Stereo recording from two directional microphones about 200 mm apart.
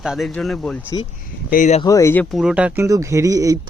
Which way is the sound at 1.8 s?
15° left (ahead or behind).